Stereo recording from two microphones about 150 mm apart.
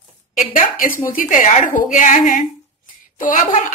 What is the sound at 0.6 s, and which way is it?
A woman's voice, 65° left (ahead or behind).